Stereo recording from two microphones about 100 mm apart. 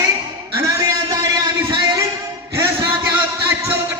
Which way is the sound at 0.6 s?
35° right (ahead or behind).